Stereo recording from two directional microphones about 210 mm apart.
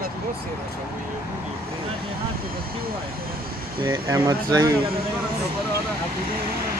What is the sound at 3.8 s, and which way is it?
Speech, 15° right (ahead or behind).